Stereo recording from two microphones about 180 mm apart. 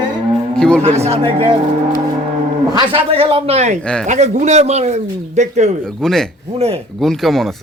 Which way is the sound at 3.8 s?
5° left (ahead or behind).